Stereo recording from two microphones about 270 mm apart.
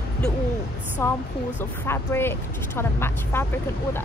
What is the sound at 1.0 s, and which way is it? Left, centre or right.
Speech, centre.